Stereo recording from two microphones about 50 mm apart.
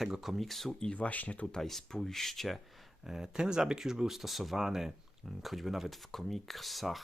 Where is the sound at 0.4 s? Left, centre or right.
Centre.